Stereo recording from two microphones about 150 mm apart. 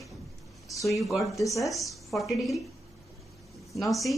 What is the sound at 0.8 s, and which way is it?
Speech, centre (ahead or behind).